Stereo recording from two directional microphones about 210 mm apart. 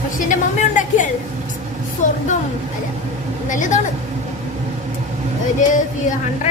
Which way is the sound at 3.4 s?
35° left (ahead or behind).